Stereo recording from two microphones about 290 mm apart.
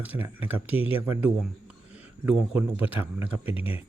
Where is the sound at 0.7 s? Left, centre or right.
Centre.